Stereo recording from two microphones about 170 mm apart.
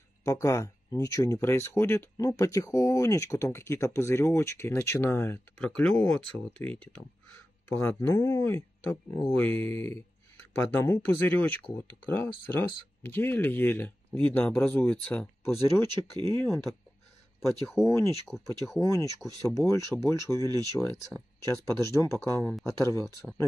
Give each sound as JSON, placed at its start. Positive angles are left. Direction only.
{"t": 0.2, "sound": "speech", "side_deg": 20}
{"t": 16.1, "sound": "speech", "side_deg": -25}
{"t": 17.4, "sound": "speech", "side_deg": 0}
{"t": 17.8, "sound": "speech", "side_deg": 15}